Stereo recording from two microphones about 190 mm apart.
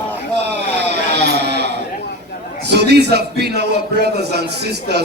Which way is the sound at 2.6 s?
60° right (ahead or behind).